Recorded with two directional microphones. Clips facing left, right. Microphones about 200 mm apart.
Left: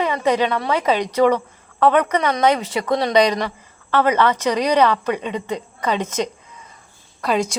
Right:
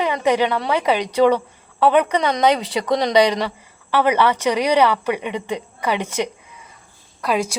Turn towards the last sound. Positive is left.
turn(degrees=-5)  # may be behind; listen again after turning